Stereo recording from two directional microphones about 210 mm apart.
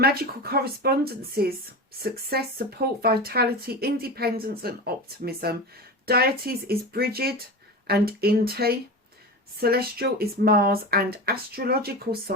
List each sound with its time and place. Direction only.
0.0 s speech: 45° right (ahead or behind)